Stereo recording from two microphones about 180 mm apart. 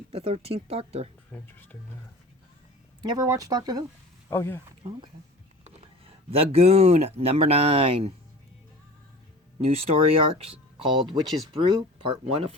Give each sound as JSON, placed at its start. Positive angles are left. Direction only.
{"t": 0.1, "sound": "speech", "side_deg": -35}
{"t": 1.3, "sound": "speech", "side_deg": 10}
{"t": 3.0, "sound": "speech", "side_deg": -20}
{"t": 4.3, "sound": "speech", "side_deg": 15}
{"t": 4.8, "sound": "speech", "side_deg": -30}
{"t": 9.6, "sound": "speech", "side_deg": -35}